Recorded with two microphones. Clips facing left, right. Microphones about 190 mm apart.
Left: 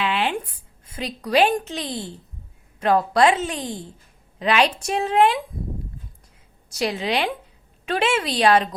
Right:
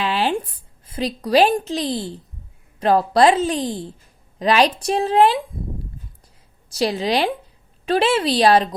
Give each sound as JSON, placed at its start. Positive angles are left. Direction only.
{"t": 0.0, "sound": "a sound", "side_deg": -35}
{"t": 0.9, "sound": "a woman's voice", "side_deg": -35}
{"t": 6.7, "sound": "a woman's voice", "side_deg": -35}